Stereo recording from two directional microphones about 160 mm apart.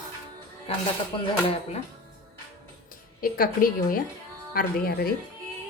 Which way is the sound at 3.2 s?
60° left (ahead or behind).